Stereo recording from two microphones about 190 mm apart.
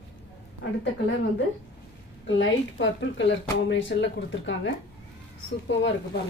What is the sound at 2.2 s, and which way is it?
Speech, 80° left.